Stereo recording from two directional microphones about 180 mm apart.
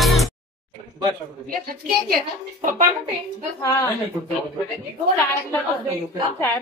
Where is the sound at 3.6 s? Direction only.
20° left (ahead or behind).